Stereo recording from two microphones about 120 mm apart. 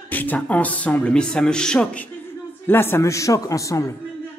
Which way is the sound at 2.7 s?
20° left (ahead or behind).